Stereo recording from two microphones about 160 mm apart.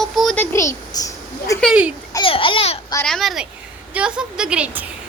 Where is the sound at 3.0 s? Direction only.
Centre (ahead or behind).